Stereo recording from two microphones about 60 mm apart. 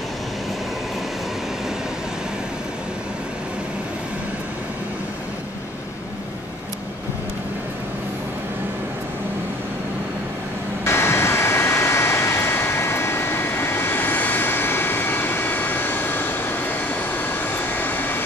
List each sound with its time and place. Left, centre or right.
10.8 s vehicle: left